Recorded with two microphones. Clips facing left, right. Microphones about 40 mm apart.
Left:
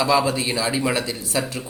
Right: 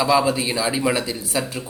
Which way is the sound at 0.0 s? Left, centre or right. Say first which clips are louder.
Right 1 dB; centre.